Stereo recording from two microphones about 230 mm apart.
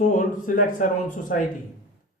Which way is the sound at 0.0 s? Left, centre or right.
Left.